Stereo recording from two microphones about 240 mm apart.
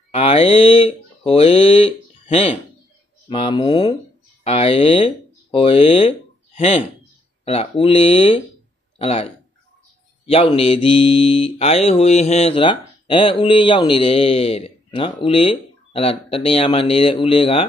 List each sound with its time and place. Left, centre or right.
0.1 s speech: left
3.3 s mantra: left
4.5 s speech: left
7.4 s mantra: left
8.9 s speech: left
10.2 s mantra: left